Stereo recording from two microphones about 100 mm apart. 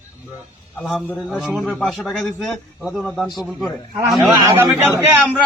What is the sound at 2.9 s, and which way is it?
Speech, 25° left (ahead or behind).